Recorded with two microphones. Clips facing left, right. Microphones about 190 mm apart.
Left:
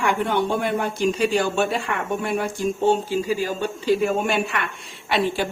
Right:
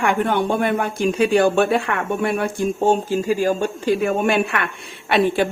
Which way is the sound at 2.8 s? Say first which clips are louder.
Right 2 dB; 45° right (ahead or behind).